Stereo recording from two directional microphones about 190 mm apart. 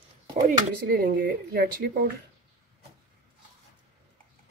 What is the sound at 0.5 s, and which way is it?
Speech, 50° right (ahead or behind).